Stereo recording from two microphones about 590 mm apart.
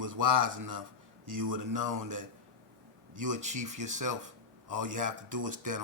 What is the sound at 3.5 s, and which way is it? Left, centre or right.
Speech, right.